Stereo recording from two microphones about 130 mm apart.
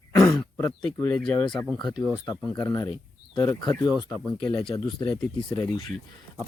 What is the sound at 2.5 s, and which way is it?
Speech, 25° left (ahead or behind).